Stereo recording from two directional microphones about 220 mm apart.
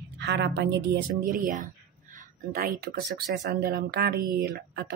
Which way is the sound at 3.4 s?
45° right (ahead or behind).